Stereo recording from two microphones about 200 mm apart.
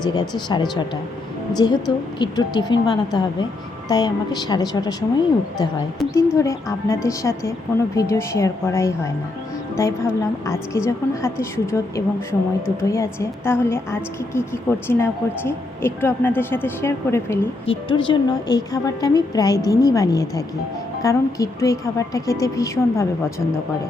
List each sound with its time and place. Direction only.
0.0 s a woman's voice: 20° left (ahead or behind)
6.1 s a woman's voice: 15° left (ahead or behind)
17.7 s a woman's voice: 25° left (ahead or behind)